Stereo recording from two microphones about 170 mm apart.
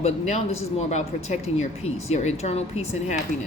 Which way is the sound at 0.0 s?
40° left (ahead or behind).